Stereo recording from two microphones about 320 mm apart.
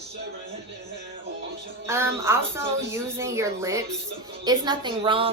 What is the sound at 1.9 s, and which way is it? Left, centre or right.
Speech, centre.